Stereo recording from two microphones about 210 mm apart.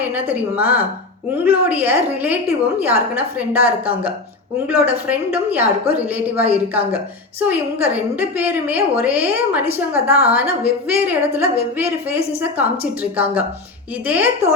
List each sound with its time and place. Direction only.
0.0 s a woman's voice: 10° right (ahead or behind)